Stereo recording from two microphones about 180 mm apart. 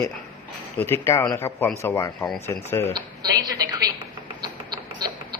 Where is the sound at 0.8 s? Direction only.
10° left (ahead or behind).